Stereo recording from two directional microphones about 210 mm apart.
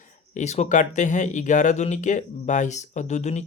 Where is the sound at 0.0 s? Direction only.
35° left (ahead or behind).